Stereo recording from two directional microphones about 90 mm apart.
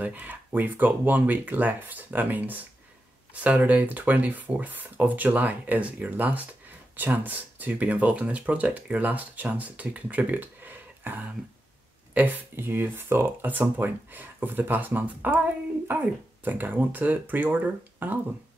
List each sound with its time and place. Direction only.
0.0 s speech: 20° right (ahead or behind)